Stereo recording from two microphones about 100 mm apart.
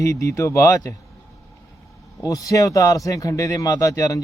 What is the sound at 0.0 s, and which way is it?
Speech, 30° left (ahead or behind).